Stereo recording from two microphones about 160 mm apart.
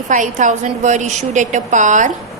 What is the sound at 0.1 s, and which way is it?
A woman's voice, 50° right (ahead or behind).